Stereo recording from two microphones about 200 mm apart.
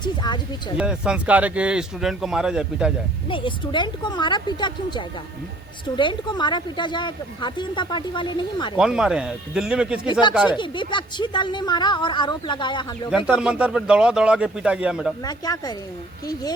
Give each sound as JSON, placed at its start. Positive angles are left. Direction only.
{"t": 0.0, "sound": "speech", "side_deg": 20}
{"t": 0.8, "sound": "speech", "side_deg": -5}
{"t": 3.2, "sound": "speech", "side_deg": 25}
{"t": 8.8, "sound": "speech", "side_deg": -5}
{"t": 10.1, "sound": "speech", "side_deg": 20}
{"t": 10.3, "sound": "speech", "side_deg": -5}
{"t": 10.6, "sound": "speech", "side_deg": 25}
{"t": 13.1, "sound": "speech", "side_deg": -5}
{"t": 15.2, "sound": "speech", "side_deg": 20}